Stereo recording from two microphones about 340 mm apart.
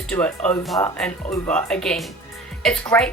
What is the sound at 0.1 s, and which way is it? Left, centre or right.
A woman's voice, centre.